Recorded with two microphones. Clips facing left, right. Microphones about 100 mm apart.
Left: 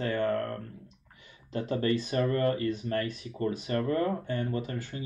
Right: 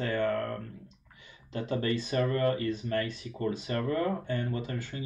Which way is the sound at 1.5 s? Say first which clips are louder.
Left 2 dB; 40° left (ahead or behind).